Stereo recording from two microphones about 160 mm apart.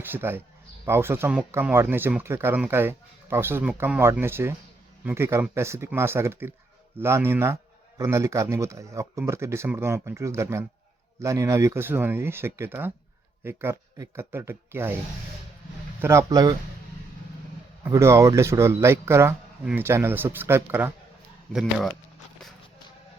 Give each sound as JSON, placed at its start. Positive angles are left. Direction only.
{"t": 0.1, "sound": "speech", "side_deg": -15}
{"t": 16.0, "sound": "speech", "side_deg": -20}
{"t": 17.8, "sound": "speech", "side_deg": -15}
{"t": 21.5, "sound": "speech", "side_deg": 0}